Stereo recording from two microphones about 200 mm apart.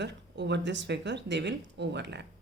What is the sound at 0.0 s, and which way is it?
Speech, 60° right (ahead or behind).